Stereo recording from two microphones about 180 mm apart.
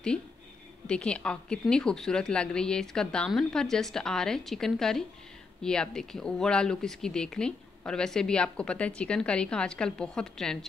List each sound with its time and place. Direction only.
0.8 s speech: 5° left (ahead or behind)